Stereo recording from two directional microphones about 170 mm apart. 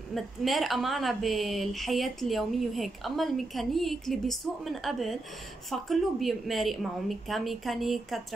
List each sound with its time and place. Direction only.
0.1 s a woman's voice: centre (ahead or behind)